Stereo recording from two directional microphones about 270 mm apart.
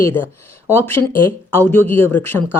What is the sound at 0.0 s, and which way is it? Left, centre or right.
Speech, centre.